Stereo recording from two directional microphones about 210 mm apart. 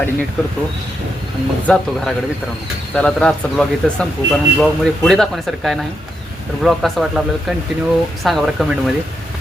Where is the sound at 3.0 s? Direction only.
5° left (ahead or behind).